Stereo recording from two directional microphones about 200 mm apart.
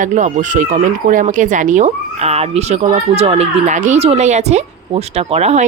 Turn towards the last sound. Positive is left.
turn(degrees=-30)  # may be behind; listen again after turning